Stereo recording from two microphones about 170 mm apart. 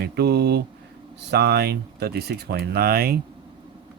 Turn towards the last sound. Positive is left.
turn(degrees=-65)  # may be behind; listen again after turning